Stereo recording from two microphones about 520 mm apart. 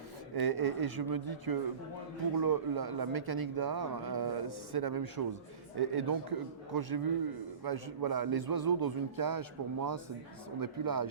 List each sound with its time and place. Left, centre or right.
0.3 s speech: right